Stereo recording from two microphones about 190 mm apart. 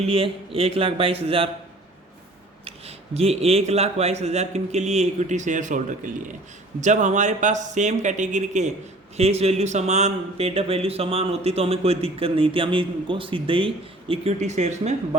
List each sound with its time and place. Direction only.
0.0 s speech: 30° right (ahead or behind)
2.6 s speech: 30° right (ahead or behind)